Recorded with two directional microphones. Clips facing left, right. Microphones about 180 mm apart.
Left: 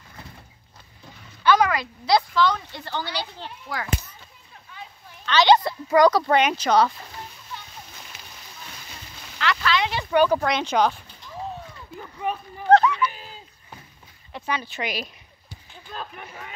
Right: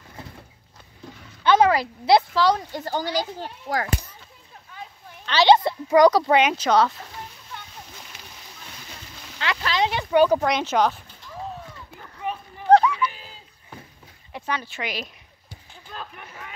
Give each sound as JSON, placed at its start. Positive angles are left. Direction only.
{"t": 1.4, "sound": "speech", "side_deg": -25}
{"t": 5.2, "sound": "a child's voice", "side_deg": -30}
{"t": 6.6, "sound": "speech", "side_deg": 5}
{"t": 9.4, "sound": "a sound", "side_deg": -20}
{"t": 10.4, "sound": "speech", "side_deg": -5}
{"t": 12.2, "sound": "a sound", "side_deg": 50}
{"t": 12.6, "sound": "a sound", "side_deg": -10}
{"t": 14.4, "sound": "speech", "side_deg": 10}
{"t": 16.0, "sound": "speech", "side_deg": 35}